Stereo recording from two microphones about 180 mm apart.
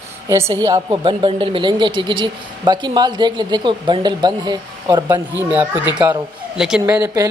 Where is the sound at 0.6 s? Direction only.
25° right (ahead or behind).